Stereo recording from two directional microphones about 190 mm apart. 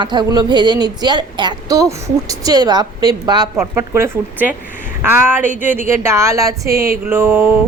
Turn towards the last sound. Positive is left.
turn(degrees=-10)  # may be behind; listen again after turning